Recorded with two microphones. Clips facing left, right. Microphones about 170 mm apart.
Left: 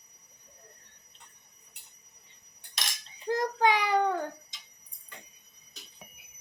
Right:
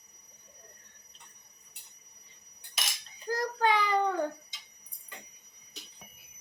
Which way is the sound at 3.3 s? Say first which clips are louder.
Left 2 dB; 20° left (ahead or behind).